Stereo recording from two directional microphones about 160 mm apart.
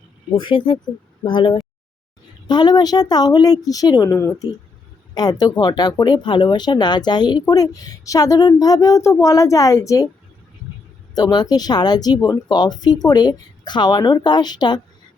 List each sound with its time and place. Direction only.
0.3 s speech: 30° left (ahead or behind)
11.1 s speech: 25° left (ahead or behind)